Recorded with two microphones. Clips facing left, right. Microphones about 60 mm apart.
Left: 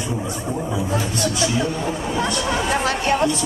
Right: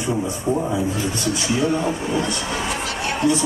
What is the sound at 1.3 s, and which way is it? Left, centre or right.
Speech, right.